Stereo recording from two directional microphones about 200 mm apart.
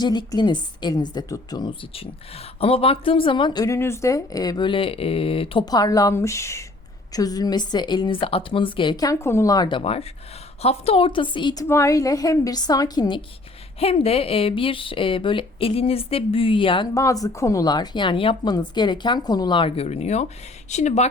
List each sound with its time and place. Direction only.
0.0 s a woman's voice: 20° left (ahead or behind)